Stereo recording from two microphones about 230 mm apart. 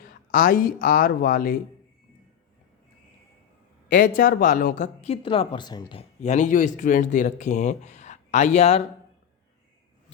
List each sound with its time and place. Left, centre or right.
0.0 s speech: left
3.8 s speech: left